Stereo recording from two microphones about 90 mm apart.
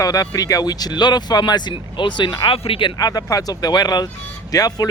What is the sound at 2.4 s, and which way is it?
Speech, 90° left.